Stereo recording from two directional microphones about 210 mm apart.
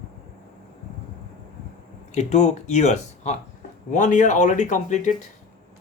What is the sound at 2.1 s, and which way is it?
Speech, 30° left (ahead or behind).